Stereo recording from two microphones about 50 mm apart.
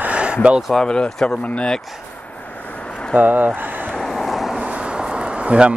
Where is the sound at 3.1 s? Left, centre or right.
Right.